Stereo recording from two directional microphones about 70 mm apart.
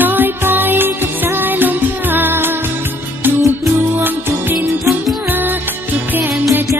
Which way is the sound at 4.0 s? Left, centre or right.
Right.